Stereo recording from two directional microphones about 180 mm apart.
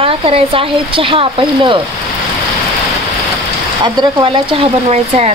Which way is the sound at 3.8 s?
30° right (ahead or behind).